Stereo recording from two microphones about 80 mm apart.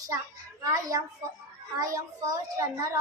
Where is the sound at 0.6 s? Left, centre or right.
Right.